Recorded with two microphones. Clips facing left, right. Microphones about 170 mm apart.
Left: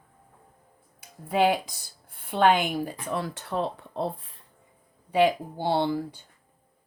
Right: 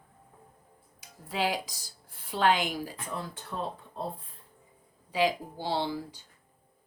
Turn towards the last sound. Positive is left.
turn(degrees=55)  # may be behind; listen again after turning